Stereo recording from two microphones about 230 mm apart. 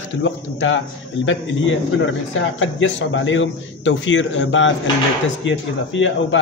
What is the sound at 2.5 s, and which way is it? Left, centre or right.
A man's voice, left.